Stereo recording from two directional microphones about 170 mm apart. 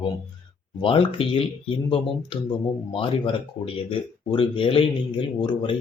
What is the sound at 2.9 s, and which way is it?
Speech, 30° left (ahead or behind).